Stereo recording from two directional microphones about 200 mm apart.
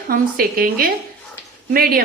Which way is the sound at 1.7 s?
50° right (ahead or behind).